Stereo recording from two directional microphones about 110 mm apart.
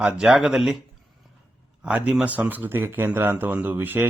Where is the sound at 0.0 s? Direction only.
10° right (ahead or behind).